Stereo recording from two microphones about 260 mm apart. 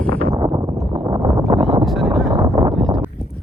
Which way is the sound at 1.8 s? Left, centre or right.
Centre.